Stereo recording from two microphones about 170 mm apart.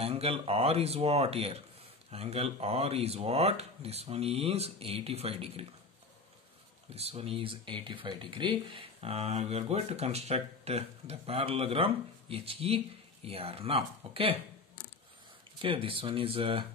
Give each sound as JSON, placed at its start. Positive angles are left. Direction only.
{"t": 0.0, "sound": "speech", "side_deg": -35}
{"t": 6.9, "sound": "speech", "side_deg": -35}
{"t": 15.6, "sound": "speech", "side_deg": -30}